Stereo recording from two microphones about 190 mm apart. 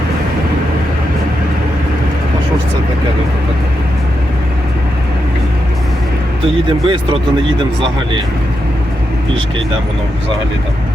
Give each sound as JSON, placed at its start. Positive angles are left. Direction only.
{"t": 6.8, "sound": "speech", "side_deg": -25}